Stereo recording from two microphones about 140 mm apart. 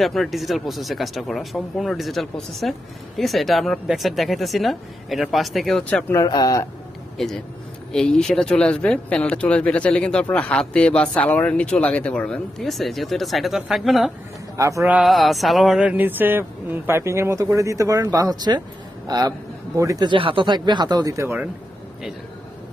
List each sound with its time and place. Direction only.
0.0 s speech: centre (ahead or behind)
6.1 s speech: 25° left (ahead or behind)
7.2 s speech: centre (ahead or behind)
14.6 s a man's voice: 20° right (ahead or behind)
14.9 s a man's voice: 5° right (ahead or behind); by 20.1 s 25° right (ahead or behind)
20.1 s speech: 40° right (ahead or behind); by 21.4 s 20° right (ahead or behind)